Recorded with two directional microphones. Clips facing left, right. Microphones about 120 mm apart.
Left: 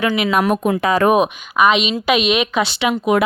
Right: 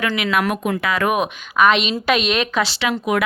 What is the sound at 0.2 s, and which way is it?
Speech, 25° left (ahead or behind).